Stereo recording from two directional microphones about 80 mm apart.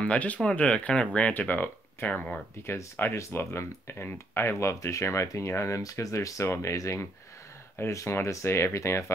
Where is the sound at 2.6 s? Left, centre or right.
Left.